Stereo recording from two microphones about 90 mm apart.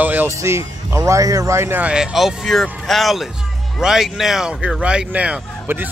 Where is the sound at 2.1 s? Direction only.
Centre (ahead or behind); by 5.8 s 15° right (ahead or behind).